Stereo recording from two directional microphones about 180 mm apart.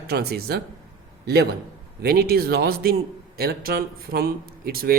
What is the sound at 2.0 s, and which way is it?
Speech, 60° right (ahead or behind).